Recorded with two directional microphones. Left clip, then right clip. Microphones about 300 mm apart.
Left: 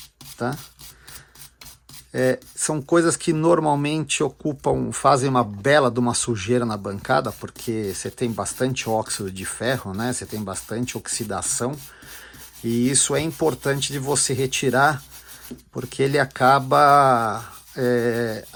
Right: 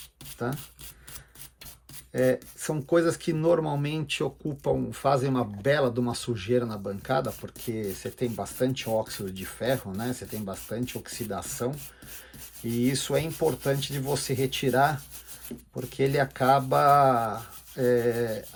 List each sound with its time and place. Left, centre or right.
0.4 s rub: centre
2.1 s speech: centre